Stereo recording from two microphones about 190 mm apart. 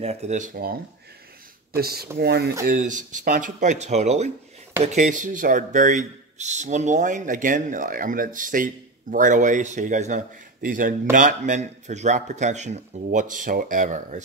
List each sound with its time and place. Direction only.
0.0 s speech: 35° right (ahead or behind)
1.8 s speech: 55° right (ahead or behind)
2.6 s speech: 45° right (ahead or behind)